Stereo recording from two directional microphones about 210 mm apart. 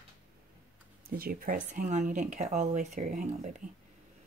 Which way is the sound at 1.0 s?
45° right (ahead or behind).